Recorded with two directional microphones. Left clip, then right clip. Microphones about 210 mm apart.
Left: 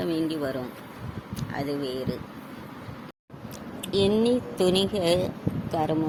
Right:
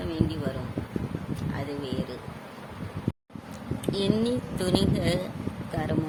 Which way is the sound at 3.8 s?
15° left (ahead or behind).